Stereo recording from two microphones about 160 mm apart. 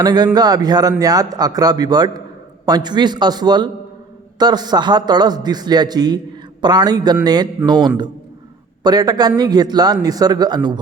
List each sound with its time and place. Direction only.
0.0 s speech: 25° right (ahead or behind)